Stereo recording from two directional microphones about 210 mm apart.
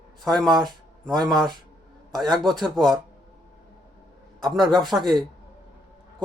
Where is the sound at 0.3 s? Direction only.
Centre (ahead or behind).